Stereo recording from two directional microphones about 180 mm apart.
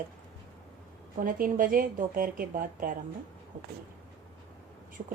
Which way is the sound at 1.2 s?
50° right (ahead or behind).